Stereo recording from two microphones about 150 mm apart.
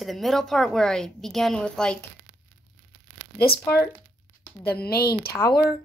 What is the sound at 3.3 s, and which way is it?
Speech, 90° left.